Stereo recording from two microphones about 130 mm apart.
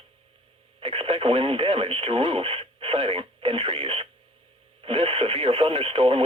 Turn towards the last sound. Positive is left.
turn(degrees=-45)  # may be behind; listen again after turning